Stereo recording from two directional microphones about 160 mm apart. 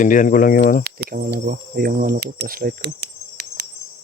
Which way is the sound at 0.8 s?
65° right (ahead or behind).